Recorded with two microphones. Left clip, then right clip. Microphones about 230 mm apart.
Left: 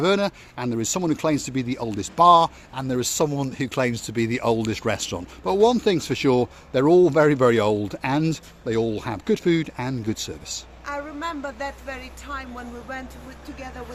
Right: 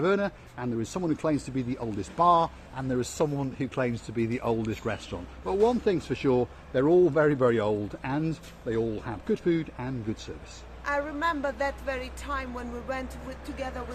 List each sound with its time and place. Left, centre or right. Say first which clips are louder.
0.0 s speech: left 5 dB; left
10.8 s a woman's voice: right 2 dB; centre